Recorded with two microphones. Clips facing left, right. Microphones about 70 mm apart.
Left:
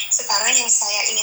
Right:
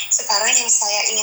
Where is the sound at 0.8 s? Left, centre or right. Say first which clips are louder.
Right 4 dB; right.